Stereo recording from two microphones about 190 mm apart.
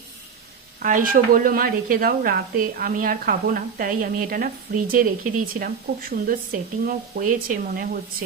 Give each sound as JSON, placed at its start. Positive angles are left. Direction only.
{"t": 0.8, "sound": "a woman's voice", "side_deg": -45}